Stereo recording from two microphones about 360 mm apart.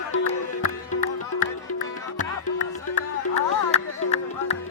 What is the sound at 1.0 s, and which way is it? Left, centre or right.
Music, left.